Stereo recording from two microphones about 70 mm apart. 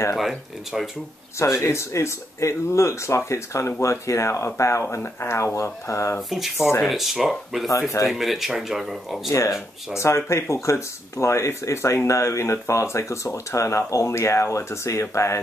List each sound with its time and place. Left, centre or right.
0.1 s speech: centre
1.4 s speech: left
6.3 s speech: centre
9.9 s speech: left